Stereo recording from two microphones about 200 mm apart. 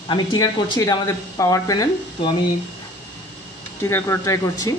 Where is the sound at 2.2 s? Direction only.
30° left (ahead or behind).